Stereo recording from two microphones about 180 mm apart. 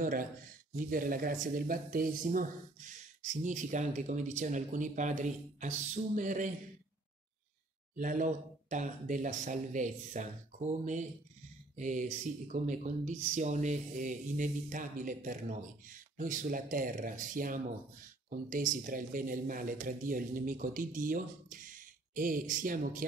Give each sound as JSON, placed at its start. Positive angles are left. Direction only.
{"t": 0.0, "sound": "speech", "side_deg": -50}
{"t": 7.9, "sound": "speech", "side_deg": -45}
{"t": 11.7, "sound": "speech", "side_deg": -45}